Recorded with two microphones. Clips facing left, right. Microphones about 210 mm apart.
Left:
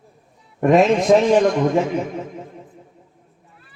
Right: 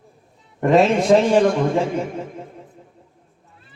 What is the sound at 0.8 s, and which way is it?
A man's voice, 30° right (ahead or behind).